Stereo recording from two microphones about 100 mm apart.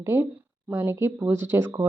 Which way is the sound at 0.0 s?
25° right (ahead or behind).